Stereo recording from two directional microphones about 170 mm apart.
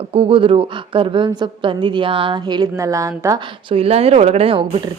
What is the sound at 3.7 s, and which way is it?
Speech, 35° right (ahead or behind).